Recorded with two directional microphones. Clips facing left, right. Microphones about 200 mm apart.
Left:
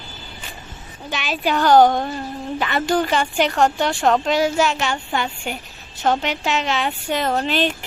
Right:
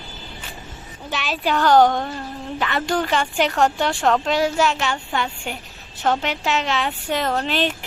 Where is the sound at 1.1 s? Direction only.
Centre (ahead or behind).